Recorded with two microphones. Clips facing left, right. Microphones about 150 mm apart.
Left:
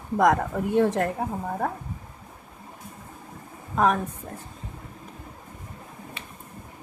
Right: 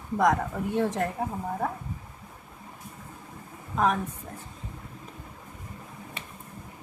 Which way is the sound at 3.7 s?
55° left (ahead or behind).